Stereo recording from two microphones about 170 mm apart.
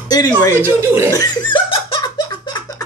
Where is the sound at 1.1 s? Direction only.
25° left (ahead or behind).